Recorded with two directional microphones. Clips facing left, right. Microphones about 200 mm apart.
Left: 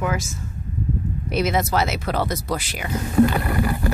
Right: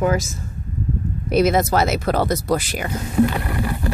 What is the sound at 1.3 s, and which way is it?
Speech, 45° right (ahead or behind).